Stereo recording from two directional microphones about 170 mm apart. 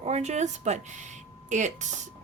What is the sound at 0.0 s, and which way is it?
Speech, 40° right (ahead or behind).